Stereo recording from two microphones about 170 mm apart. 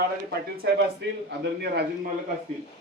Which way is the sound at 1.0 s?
90° right.